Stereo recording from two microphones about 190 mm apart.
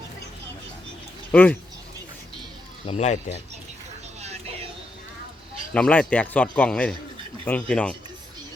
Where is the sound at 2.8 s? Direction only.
35° left (ahead or behind).